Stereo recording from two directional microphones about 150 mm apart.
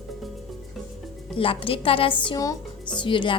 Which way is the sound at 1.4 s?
35° left (ahead or behind).